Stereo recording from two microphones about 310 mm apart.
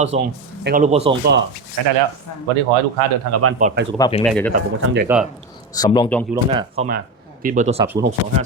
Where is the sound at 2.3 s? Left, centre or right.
Left.